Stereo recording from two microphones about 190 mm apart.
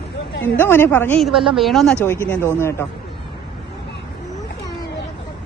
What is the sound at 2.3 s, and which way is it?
Speech, 15° left (ahead or behind).